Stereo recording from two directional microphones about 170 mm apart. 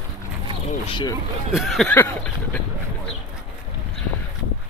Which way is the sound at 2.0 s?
15° left (ahead or behind).